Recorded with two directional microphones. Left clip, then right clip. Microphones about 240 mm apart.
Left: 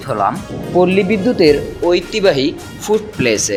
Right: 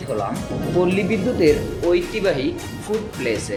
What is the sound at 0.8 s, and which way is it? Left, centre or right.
Speech, left.